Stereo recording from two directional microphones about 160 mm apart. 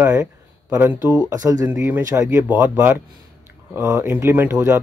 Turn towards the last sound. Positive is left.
turn(degrees=-15)  # may be behind; listen again after turning